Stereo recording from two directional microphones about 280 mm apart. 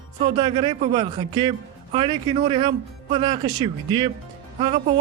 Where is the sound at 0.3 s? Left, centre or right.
Centre.